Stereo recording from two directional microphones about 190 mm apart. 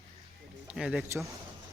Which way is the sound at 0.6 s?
5° right (ahead or behind).